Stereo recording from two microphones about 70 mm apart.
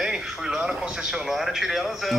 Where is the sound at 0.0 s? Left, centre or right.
Centre.